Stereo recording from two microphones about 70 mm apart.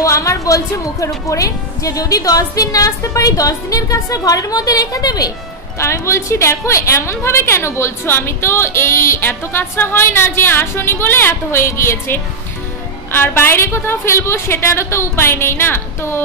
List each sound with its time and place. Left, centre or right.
0.0 s a woman's voice: left
5.8 s a woman's voice: left